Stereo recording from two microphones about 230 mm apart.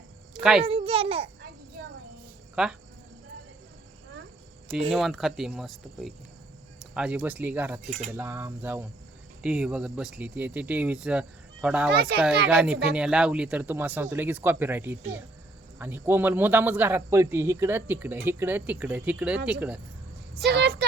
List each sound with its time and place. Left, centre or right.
0.6 s a child's voice: right
2.6 s speech: centre
4.9 s speech: centre
7.9 s a child's voice: right
8.1 s speech: centre
11.9 s speech: right
12.5 s speech: centre
20.4 s speech: right